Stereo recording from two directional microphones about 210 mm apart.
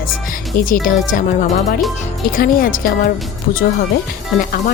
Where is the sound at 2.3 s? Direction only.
40° left (ahead or behind).